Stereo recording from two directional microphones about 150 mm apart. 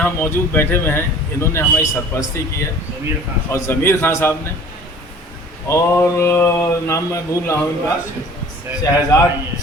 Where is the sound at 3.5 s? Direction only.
15° left (ahead or behind).